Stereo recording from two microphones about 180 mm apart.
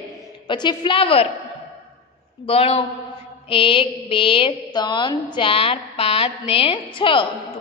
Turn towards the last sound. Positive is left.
turn(degrees=30)  # may be behind; listen again after turning